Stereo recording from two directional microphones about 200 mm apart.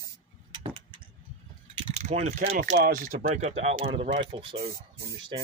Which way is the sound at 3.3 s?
35° right (ahead or behind).